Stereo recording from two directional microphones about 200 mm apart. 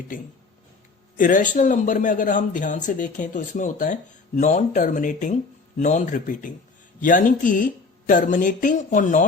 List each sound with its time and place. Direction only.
1.1 s speech: 40° left (ahead or behind)